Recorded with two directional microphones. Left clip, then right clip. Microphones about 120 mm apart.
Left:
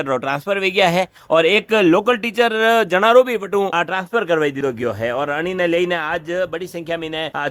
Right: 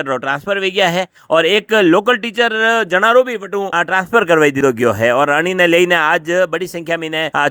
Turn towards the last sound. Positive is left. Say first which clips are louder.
# right 7 dB
turn(degrees=-50)  # may be behind; listen again after turning